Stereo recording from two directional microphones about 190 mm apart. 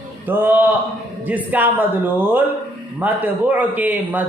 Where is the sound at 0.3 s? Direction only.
10° right (ahead or behind).